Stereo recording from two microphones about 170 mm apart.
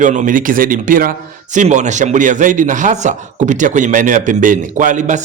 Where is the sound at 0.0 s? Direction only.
50° right (ahead or behind).